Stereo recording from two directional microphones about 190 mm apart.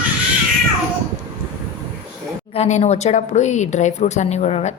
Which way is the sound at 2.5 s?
35° left (ahead or behind).